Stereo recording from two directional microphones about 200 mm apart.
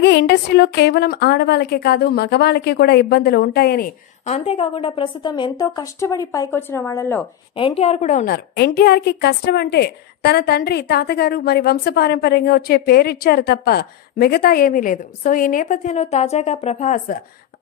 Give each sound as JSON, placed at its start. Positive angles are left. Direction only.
{"t": 0.0, "sound": "a woman's voice", "side_deg": 55}
{"t": 4.3, "sound": "a woman's voice", "side_deg": 30}
{"t": 7.5, "sound": "a woman's voice", "side_deg": 30}
{"t": 8.5, "sound": "a woman's voice", "side_deg": 50}